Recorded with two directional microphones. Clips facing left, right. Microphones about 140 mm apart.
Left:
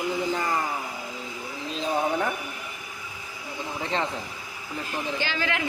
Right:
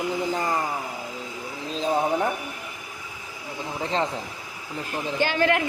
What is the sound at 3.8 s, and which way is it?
Speech, 35° right (ahead or behind).